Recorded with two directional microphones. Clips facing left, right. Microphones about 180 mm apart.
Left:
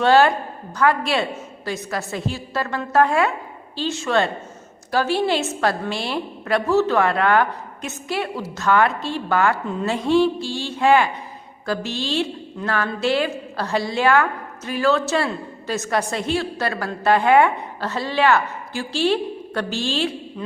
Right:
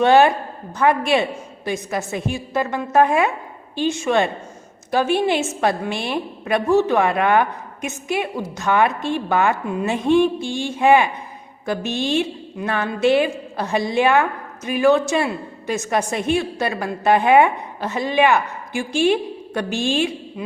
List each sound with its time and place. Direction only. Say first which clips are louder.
0.0 s a woman's voice: right 2 dB; 20° right (ahead or behind)